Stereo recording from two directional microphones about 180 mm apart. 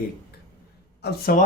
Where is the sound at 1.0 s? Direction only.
60° left (ahead or behind).